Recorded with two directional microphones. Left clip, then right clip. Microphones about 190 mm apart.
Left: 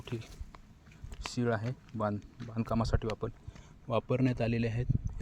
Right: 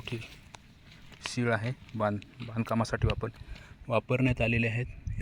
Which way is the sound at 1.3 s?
10° right (ahead or behind).